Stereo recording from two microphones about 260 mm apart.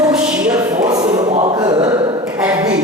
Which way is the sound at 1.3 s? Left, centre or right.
Right.